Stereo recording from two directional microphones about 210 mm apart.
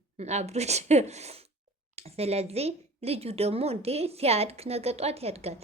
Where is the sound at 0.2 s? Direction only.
30° right (ahead or behind).